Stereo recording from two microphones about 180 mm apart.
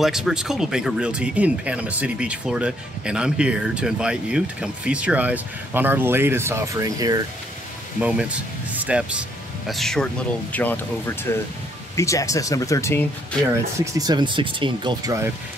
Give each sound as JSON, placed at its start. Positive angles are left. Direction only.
{"t": 0.0, "sound": "speech", "side_deg": -5}
{"t": 8.0, "sound": "speech", "side_deg": -5}
{"t": 13.7, "sound": "speech", "side_deg": -20}